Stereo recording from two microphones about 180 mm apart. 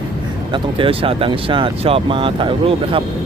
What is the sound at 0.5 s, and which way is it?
Speech, 30° right (ahead or behind).